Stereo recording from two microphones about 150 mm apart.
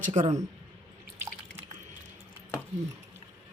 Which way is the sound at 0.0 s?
55° right (ahead or behind).